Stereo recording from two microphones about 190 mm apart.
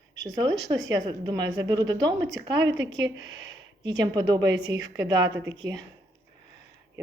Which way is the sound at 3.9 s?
20° right (ahead or behind).